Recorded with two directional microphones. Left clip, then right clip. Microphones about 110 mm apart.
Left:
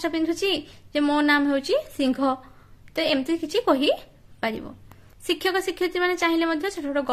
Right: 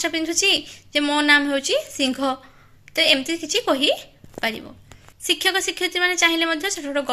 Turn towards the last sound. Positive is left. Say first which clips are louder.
# right 2 dB
turn(degrees=25)  # may be behind; listen again after turning